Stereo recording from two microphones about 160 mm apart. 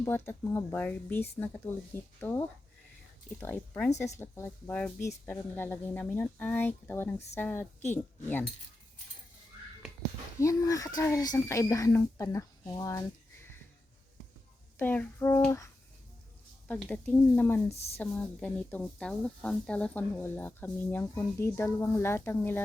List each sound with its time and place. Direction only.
0.0 s speech: 15° left (ahead or behind)
3.4 s speech: 10° left (ahead or behind)
10.4 s speech: 20° left (ahead or behind)
14.8 s speech: 10° left (ahead or behind)
17.7 s a sound: 40° left (ahead or behind)
17.9 s speech: 10° left (ahead or behind)